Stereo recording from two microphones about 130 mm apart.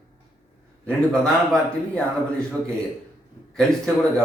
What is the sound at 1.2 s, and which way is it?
Speech, 5° left (ahead or behind).